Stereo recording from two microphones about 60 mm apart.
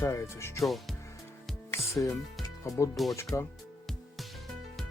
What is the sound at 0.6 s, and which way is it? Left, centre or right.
Speech, centre.